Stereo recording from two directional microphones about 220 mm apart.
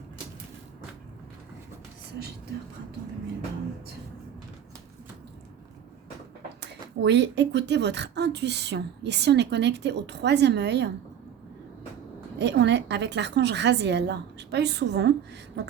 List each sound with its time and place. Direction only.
6.6 s speech: 50° right (ahead or behind)
12.4 s speech: 50° right (ahead or behind)